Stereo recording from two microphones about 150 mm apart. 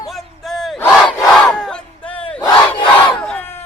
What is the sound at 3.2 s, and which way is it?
Crowd, 10° left (ahead or behind).